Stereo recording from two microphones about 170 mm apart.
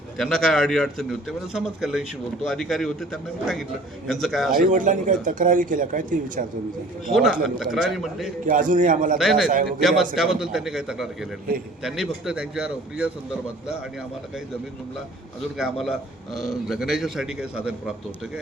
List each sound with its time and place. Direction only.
0.2 s a man's voice: 5° left (ahead or behind)
4.5 s speech: 50° right (ahead or behind)
7.1 s a man's voice: centre (ahead or behind)
8.4 s speech: 50° right (ahead or behind)
9.1 s a man's voice: centre (ahead or behind)
9.5 s speech: 50° right (ahead or behind)
10.2 s a man's voice: centre (ahead or behind)
15.5 s a man's voice: centre (ahead or behind)